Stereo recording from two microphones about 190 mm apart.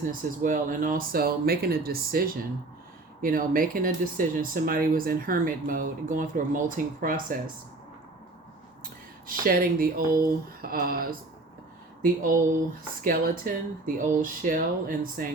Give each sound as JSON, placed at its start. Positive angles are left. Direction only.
{"t": 0.1, "sound": "speech", "side_deg": -45}
{"t": 9.2, "sound": "speech", "side_deg": -50}